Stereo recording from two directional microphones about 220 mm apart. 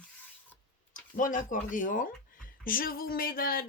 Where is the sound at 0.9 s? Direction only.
35° left (ahead or behind).